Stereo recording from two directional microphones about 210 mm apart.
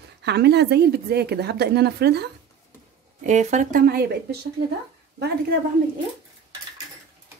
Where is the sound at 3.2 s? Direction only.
35° right (ahead or behind).